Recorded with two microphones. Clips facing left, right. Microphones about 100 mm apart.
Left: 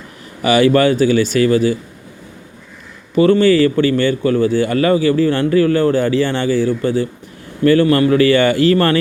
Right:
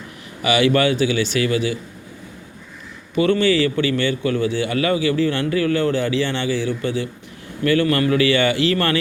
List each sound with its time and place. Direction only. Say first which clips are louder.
0.4 s a man's voice: left 5 dB; 40° left (ahead or behind)
3.2 s a man's voice: left 6 dB; 35° left (ahead or behind)